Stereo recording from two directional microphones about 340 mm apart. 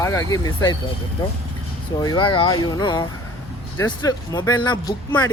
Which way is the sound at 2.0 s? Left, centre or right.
Centre.